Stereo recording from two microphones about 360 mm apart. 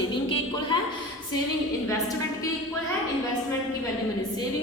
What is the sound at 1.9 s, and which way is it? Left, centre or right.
Speech, centre.